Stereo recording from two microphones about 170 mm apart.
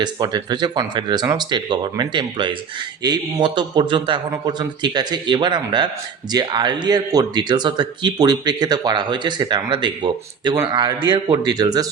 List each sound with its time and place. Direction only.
0.0 s speech: 25° right (ahead or behind)